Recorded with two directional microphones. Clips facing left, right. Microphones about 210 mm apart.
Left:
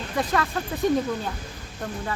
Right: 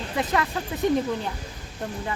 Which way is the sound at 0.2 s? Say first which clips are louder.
Left 1 dB; 20° right (ahead or behind).